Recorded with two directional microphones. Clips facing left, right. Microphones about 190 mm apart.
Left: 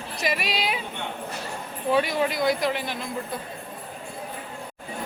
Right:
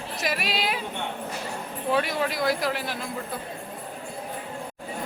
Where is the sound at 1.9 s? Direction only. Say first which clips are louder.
Left 3 dB; centre (ahead or behind).